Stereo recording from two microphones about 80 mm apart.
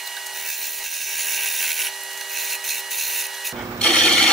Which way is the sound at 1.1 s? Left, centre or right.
Centre.